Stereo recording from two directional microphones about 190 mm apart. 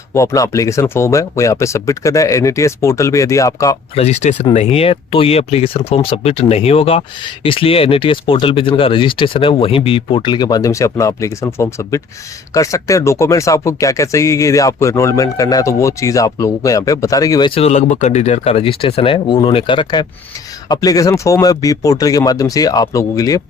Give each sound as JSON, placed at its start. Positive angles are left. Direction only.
{"t": 0.1, "sound": "speech", "side_deg": 15}
{"t": 3.9, "sound": "speech", "side_deg": 35}